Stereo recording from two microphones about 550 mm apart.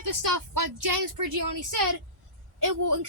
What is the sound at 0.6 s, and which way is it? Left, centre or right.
Speech, right.